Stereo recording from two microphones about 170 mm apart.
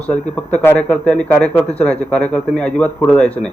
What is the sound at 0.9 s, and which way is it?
Speech, 10° left (ahead or behind).